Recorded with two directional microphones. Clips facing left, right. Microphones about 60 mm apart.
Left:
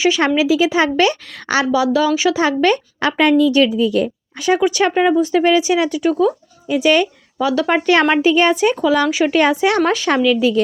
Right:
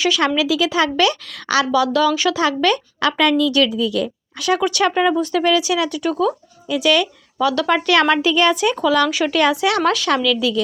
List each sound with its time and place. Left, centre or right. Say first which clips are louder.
0.0 s a woman's voice: left 3 dB; left
6.7 s a woman's voice: left 3 dB; left
7.3 s a woman's voice: left 1 dB; centre